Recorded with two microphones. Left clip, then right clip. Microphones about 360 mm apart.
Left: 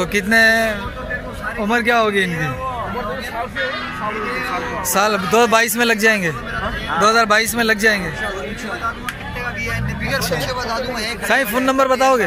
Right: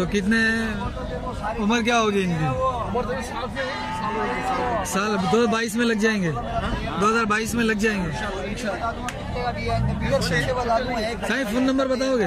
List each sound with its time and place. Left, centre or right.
0.0 s a man's voice: centre
4.9 s a man's voice: centre
10.5 s speech: right
11.2 s a man's voice: centre